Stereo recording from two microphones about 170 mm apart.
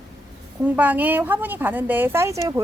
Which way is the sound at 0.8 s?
10° right (ahead or behind).